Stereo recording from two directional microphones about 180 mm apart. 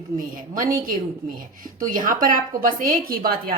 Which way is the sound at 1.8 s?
50° right (ahead or behind).